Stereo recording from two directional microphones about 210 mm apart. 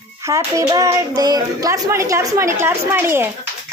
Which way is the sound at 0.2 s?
15° right (ahead or behind).